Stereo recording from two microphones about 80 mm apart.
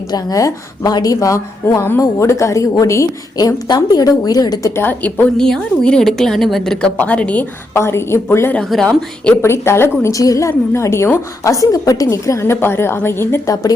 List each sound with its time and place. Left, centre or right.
0.1 s a woman's voice: left
4.6 s a woman's voice: left
5.4 s a woman's voice: centre
7.0 s a woman's voice: centre
7.7 s a woman's voice: left
8.7 s a woman's voice: centre
9.3 s a woman's voice: left
10.1 s a woman's voice: left
13.5 s a woman's voice: left